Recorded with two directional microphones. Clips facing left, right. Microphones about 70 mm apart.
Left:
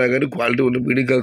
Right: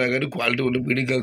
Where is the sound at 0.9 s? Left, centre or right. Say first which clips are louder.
Left 6 dB; left.